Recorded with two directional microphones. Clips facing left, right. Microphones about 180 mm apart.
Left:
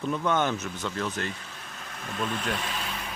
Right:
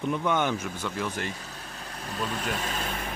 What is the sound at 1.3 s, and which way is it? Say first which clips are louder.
Speech: right 2 dB; 40° right (ahead or behind).